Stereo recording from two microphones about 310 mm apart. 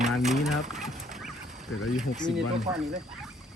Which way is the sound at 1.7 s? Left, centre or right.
Left.